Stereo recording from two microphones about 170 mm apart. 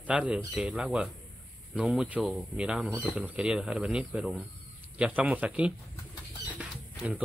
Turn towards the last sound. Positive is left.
turn(degrees=-10)  # may be behind; listen again after turning